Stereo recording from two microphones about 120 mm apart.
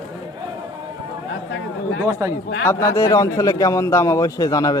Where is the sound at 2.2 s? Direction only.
25° right (ahead or behind).